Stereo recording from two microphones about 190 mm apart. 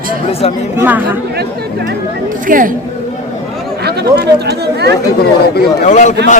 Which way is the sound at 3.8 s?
60° right (ahead or behind).